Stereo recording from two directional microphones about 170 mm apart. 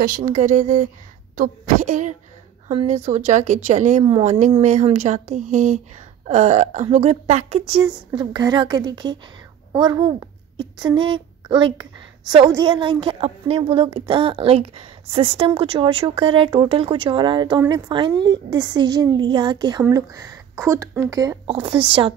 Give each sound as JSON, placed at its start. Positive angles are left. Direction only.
{"t": 0.0, "sound": "a woman's voice", "side_deg": -50}
{"t": 21.5, "sound": "speech", "side_deg": -30}